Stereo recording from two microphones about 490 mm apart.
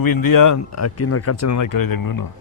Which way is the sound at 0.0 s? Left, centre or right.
Left.